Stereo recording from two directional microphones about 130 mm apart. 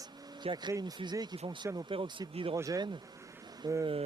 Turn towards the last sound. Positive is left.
turn(degrees=-30)  # may be behind; listen again after turning